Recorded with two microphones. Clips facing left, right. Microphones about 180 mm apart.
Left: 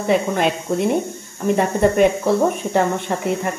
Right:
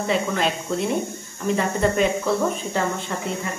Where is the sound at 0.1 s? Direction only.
55° left (ahead or behind).